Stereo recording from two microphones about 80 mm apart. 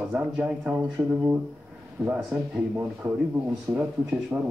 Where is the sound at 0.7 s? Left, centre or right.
Right.